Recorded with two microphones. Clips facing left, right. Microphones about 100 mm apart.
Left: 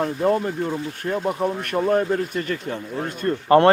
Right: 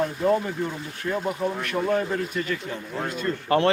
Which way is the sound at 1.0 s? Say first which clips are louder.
Left 2 dB; 20° left (ahead or behind).